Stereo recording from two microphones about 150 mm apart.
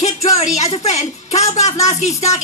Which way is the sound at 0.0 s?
50° left (ahead or behind).